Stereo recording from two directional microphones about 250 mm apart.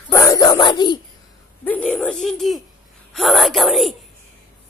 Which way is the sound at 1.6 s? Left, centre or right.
Centre.